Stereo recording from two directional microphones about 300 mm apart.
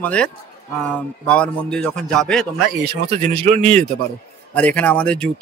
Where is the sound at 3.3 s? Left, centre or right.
Right.